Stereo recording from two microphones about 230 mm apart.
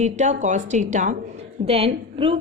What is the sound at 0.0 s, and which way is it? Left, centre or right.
A woman's voice, right.